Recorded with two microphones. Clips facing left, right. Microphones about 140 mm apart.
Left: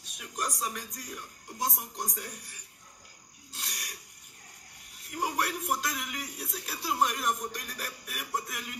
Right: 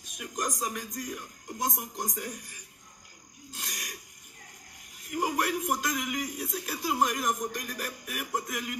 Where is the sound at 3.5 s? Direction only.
50° right (ahead or behind).